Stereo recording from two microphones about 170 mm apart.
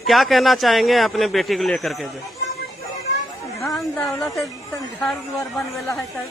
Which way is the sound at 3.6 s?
Centre (ahead or behind).